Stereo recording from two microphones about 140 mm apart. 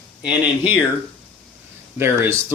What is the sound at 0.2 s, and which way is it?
Speech, 10° right (ahead or behind).